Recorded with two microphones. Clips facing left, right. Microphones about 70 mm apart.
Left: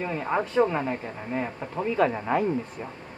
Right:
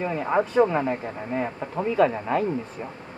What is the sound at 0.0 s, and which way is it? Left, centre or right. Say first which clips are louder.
Speech: right 3 dB; centre.